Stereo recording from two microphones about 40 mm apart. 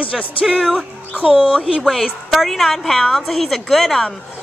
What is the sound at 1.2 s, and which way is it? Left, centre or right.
Speech, right.